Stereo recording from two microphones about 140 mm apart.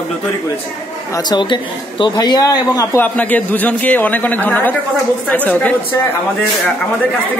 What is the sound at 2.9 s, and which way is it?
Speech, 10° left (ahead or behind).